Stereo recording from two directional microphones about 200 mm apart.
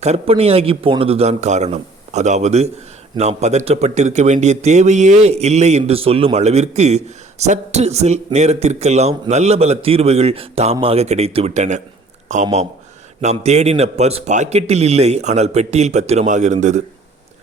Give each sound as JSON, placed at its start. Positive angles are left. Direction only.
{"t": 0.0, "sound": "speech", "side_deg": -30}